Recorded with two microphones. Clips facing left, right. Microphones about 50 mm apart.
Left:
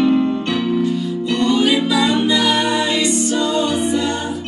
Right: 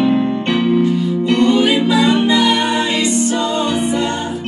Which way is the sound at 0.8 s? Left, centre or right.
Right.